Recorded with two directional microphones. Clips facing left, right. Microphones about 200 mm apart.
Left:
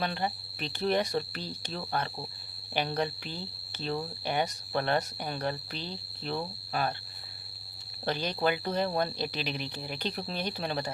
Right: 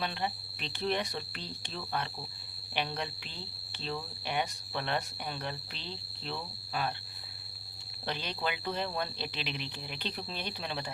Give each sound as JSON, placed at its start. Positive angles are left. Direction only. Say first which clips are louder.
{"t": 0.0, "sound": "speech", "louder": "left 3 dB", "side_deg": 45}
{"t": 8.0, "sound": "speech", "louder": "left 7 dB", "side_deg": 45}